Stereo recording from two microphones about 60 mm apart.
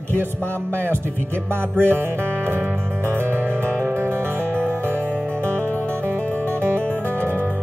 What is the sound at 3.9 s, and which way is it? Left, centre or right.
Music, right.